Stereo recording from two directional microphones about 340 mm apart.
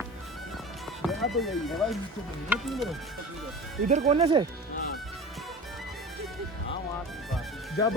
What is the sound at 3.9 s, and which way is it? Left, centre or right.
Speech, centre.